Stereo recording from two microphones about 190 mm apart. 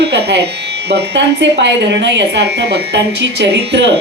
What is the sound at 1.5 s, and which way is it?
A woman's voice, 65° right (ahead or behind).